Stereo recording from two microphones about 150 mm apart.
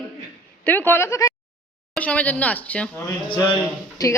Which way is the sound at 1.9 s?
10° left (ahead or behind).